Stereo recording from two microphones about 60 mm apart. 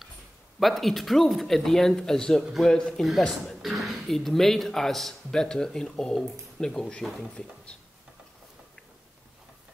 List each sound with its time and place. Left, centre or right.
0.6 s speech: centre